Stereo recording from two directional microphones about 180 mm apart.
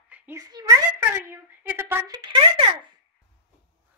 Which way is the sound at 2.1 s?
25° right (ahead or behind).